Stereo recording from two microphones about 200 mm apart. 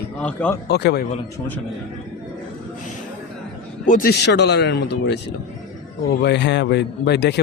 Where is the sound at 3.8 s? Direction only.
45° left (ahead or behind).